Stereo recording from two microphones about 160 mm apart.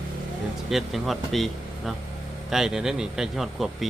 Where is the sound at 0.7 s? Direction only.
Centre (ahead or behind).